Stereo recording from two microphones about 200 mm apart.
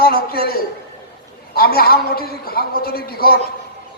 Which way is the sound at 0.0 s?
50° left (ahead or behind).